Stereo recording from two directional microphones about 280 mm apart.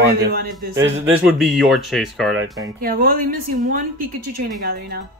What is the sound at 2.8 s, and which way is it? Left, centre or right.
Speech, right.